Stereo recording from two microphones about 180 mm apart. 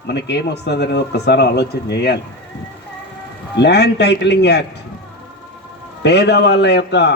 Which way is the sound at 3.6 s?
65° left (ahead or behind).